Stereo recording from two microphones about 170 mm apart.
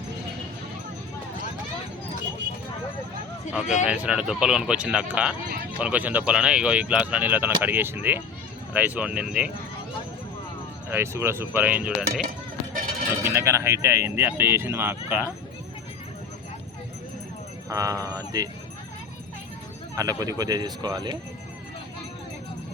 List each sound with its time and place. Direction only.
3.8 s speech: 5° right (ahead or behind)
10.9 s speech: 15° right (ahead or behind)
12.7 s run: 55° right (ahead or behind)
13.2 s speech: 15° right (ahead or behind)
17.7 s speech: 20° right (ahead or behind)
20.0 s speech: 20° right (ahead or behind)